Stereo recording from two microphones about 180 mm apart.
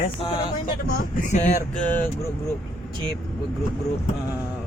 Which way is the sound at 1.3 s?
40° left (ahead or behind).